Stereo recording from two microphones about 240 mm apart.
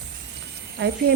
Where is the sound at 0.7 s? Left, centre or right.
Right.